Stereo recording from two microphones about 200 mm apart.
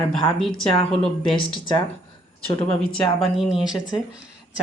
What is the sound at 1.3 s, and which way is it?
Speech, 25° left (ahead or behind).